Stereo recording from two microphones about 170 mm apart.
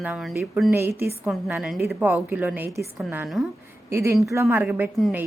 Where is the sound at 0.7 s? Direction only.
15° right (ahead or behind).